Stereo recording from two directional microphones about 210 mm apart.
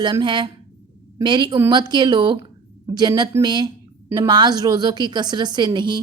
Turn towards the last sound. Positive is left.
turn(degrees=-20)  # may be behind; listen again after turning